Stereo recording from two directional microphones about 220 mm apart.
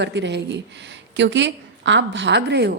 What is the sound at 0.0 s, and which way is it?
A woman's voice, 50° right (ahead or behind).